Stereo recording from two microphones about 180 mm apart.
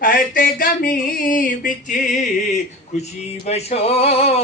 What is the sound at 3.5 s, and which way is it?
Male singing, 35° left (ahead or behind).